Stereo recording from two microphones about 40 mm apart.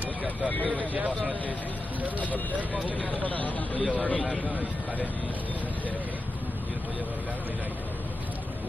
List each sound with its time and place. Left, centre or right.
0.0 s vehicle: right
2.1 s speech: left